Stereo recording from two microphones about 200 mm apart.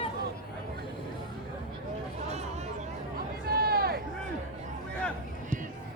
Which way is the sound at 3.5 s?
50° right (ahead or behind).